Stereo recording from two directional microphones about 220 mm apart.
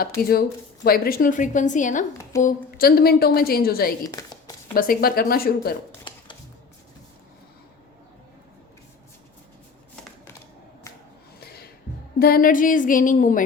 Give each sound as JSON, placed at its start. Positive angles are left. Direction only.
{"t": 0.2, "sound": "a woman's voice", "side_deg": 45}
{"t": 4.0, "sound": "a sound", "side_deg": 15}
{"t": 4.7, "sound": "a woman's voice", "side_deg": 40}
{"t": 12.2, "sound": "a woman's voice", "side_deg": 40}